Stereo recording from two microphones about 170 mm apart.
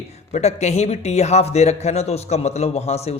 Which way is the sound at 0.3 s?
40° left (ahead or behind).